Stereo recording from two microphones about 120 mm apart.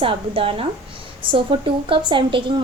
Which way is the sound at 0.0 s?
50° right (ahead or behind).